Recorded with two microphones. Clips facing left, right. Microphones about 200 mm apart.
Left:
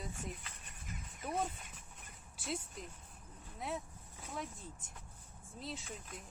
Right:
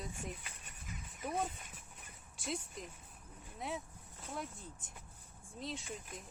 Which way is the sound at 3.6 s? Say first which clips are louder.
Left 1 dB; centre (ahead or behind).